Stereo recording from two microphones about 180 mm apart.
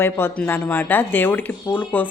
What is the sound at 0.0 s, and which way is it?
Speech, 10° left (ahead or behind).